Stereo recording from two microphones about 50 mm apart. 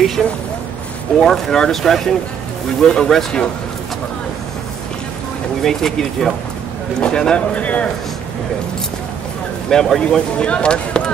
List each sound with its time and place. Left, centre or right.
0.2 s speech: centre
1.2 s speech: centre
5.6 s a man's voice: centre; by 7.9 s left
9.7 s a man's voice: centre